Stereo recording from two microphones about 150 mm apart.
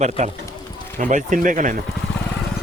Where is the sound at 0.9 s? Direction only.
60° right (ahead or behind).